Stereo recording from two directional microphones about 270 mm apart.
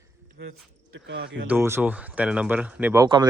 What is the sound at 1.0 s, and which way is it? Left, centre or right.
Speech, right.